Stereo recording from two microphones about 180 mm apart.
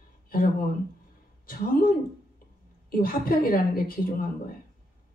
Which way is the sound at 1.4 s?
50° left (ahead or behind).